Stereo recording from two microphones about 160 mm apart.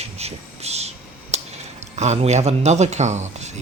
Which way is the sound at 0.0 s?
40° right (ahead or behind).